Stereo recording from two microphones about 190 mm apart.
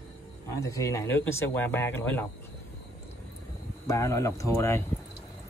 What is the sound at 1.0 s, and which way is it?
Speech, 75° left (ahead or behind).